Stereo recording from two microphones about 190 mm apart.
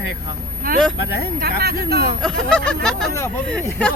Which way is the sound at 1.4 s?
55° right (ahead or behind).